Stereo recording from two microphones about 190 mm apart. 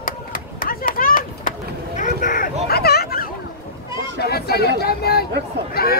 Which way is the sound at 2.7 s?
55° left (ahead or behind).